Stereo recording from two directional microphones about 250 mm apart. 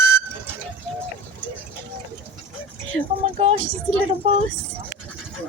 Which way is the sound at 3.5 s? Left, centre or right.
Right.